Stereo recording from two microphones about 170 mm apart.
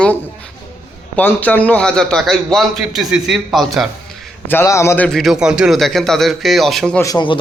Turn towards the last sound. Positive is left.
turn(degrees=25)  # may be behind; listen again after turning